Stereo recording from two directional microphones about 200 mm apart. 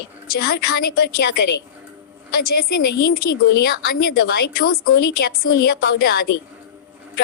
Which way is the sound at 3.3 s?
60° left (ahead or behind).